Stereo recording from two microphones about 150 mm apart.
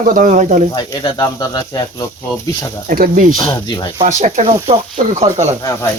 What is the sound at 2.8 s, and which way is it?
Speech, 70° right (ahead or behind).